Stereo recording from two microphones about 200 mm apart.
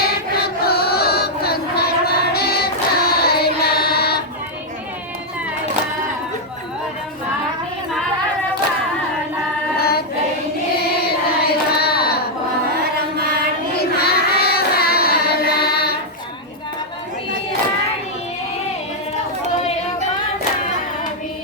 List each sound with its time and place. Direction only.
0.6 s chant: 50° left (ahead or behind)
3.9 s a sound: 50° left (ahead or behind)
9.7 s choir: 50° left (ahead or behind)
11.3 s carnatic music: 50° left (ahead or behind)
13.7 s carnatic music: 50° left (ahead or behind)